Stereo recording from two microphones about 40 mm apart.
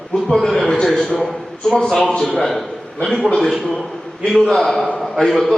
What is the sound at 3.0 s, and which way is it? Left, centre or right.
Speech, centre.